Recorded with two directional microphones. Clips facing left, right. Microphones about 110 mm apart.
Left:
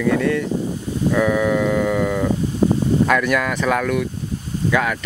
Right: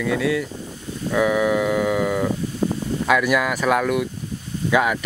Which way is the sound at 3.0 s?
5° right (ahead or behind).